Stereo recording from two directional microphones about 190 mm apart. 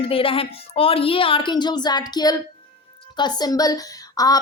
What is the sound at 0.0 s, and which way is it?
A woman's voice, 30° left (ahead or behind).